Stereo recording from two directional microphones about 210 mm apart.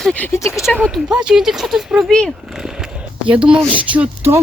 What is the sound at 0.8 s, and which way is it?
Speech, 5° right (ahead or behind).